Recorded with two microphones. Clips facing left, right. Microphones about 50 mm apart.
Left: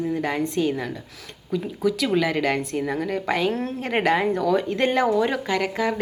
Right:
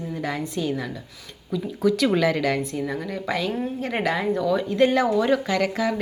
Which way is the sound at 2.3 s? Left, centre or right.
Left.